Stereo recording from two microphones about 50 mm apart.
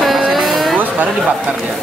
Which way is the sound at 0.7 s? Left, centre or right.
Right.